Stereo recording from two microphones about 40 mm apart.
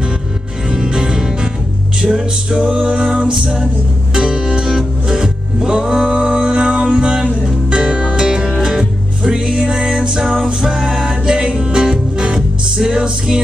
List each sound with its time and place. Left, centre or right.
0.7 s music: centre